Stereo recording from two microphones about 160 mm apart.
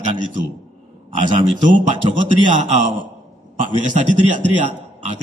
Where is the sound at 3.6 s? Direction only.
50° right (ahead or behind).